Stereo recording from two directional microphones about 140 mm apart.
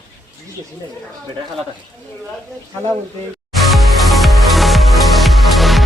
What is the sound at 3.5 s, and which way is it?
Music, centre (ahead or behind).